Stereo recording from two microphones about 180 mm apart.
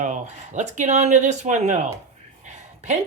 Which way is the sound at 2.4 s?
40° right (ahead or behind).